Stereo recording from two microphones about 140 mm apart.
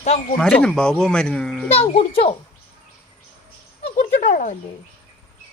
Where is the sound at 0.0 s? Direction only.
55° left (ahead or behind).